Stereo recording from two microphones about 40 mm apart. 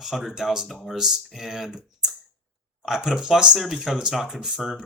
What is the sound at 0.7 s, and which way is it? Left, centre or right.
Speech, centre.